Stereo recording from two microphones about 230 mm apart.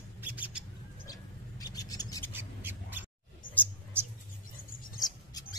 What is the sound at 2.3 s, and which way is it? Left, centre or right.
Mouse, centre.